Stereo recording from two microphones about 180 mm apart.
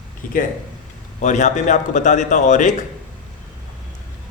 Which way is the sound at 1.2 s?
45° left (ahead or behind).